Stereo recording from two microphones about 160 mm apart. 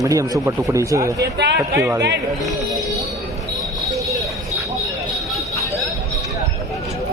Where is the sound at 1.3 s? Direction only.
90° right.